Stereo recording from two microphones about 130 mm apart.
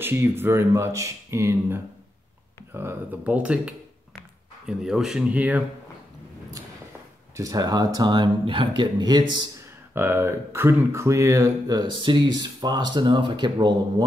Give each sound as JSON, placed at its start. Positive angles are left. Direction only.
{"t": 0.0, "sound": "speech", "side_deg": -15}
{"t": 7.3, "sound": "speech", "side_deg": -30}
{"t": 9.9, "sound": "speech", "side_deg": -15}